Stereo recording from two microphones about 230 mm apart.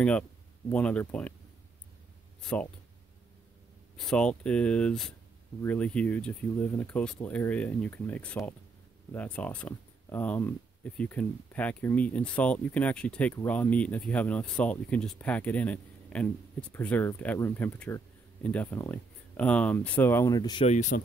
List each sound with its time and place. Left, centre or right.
0.7 s speech: centre
2.4 s speech: centre
3.9 s speech: centre
20.6 s speech: left